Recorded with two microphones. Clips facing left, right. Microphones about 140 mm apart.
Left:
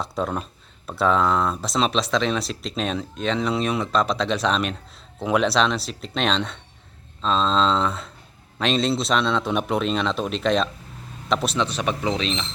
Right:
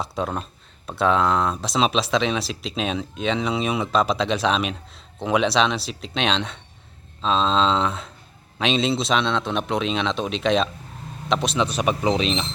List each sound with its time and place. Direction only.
0.0 s speech: centre (ahead or behind)
11.6 s speech: 10° right (ahead or behind)